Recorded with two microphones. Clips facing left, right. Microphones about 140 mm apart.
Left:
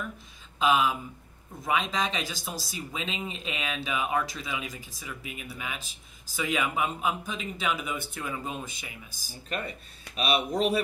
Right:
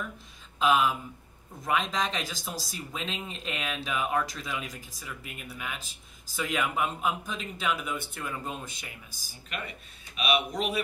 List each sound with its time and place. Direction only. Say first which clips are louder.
0.6 s speech: even; centre (ahead or behind)
9.5 s speech: left 4 dB; 35° left (ahead or behind)